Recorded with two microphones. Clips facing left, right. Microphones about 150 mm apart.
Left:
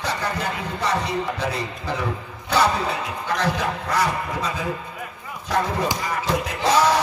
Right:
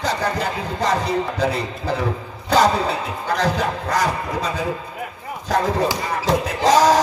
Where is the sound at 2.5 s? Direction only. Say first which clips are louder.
Right 4 dB; 40° right (ahead or behind).